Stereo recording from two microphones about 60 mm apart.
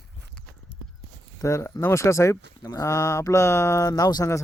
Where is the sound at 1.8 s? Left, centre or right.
Left.